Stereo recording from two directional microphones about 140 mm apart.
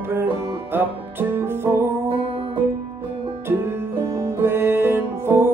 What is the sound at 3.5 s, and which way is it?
Music, 15° right (ahead or behind).